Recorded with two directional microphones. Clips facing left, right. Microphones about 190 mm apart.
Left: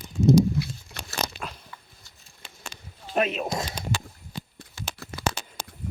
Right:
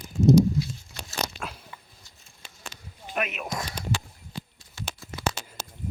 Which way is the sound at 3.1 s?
30° left (ahead or behind).